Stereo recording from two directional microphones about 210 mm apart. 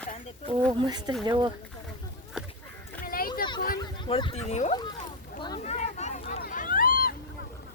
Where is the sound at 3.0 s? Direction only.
45° left (ahead or behind).